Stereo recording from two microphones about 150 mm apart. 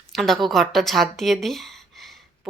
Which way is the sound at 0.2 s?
Centre (ahead or behind).